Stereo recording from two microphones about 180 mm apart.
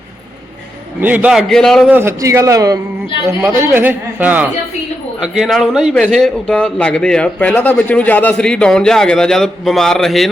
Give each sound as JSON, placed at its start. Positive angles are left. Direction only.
{"t": 1.0, "sound": "a man's voice", "side_deg": -10}
{"t": 1.9, "sound": "a man's voice", "side_deg": -15}